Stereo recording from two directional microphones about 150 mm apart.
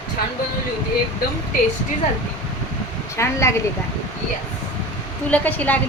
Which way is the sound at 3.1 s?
20° left (ahead or behind).